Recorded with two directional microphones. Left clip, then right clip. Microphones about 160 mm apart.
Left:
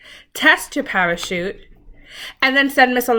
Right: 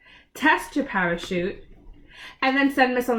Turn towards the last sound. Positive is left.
turn(degrees=20)  # may be behind; listen again after turning